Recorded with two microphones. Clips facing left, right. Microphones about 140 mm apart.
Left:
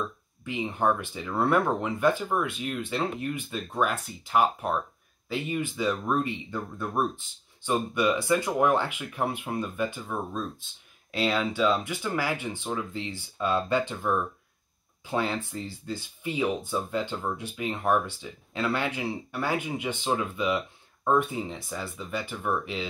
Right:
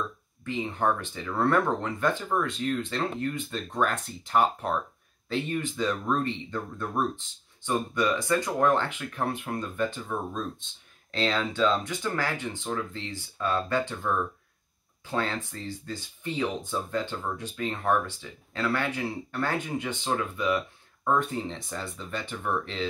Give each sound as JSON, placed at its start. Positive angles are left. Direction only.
{"t": 0.4, "sound": "speech", "side_deg": 15}